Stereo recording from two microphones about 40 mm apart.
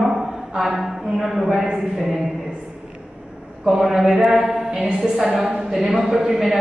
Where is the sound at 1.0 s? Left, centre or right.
Centre.